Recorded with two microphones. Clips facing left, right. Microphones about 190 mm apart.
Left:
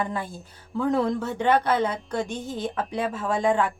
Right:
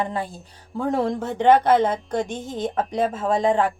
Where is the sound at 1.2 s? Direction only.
50° right (ahead or behind).